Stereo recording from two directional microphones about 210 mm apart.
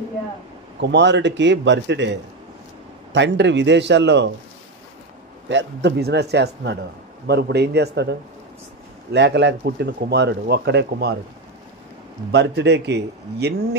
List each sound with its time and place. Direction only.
0.7 s a man's voice: 55° right (ahead or behind)
5.5 s speech: 55° right (ahead or behind)
12.3 s speech: 55° right (ahead or behind)